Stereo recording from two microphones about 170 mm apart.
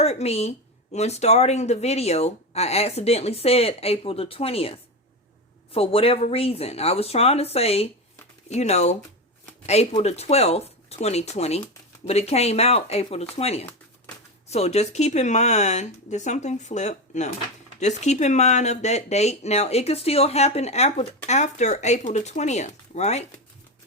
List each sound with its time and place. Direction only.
0.0 s speech: 40° left (ahead or behind)
10.0 s speech: 40° left (ahead or behind)